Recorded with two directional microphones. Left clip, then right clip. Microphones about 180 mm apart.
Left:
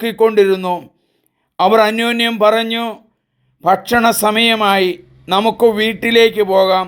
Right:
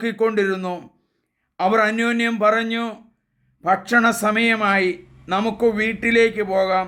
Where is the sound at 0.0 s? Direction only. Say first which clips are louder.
Left 8 dB; 30° left (ahead or behind).